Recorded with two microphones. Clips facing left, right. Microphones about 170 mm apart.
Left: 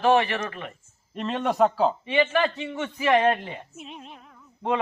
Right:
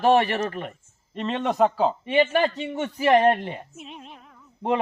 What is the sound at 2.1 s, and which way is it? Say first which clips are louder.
A man's voice: right 2 dB; 40° right (ahead or behind).